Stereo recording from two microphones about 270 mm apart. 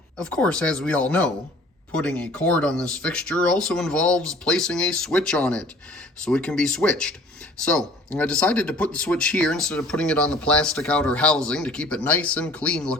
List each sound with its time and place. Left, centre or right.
0.2 s speech: centre